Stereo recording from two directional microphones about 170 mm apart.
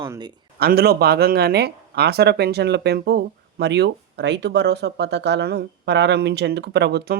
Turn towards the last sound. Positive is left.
turn(degrees=-75)  # may be behind; listen again after turning